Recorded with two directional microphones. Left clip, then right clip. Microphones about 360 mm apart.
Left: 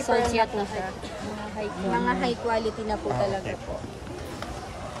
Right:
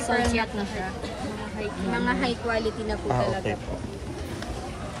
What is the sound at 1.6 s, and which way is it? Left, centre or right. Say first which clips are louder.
Speech: left 2 dB; left.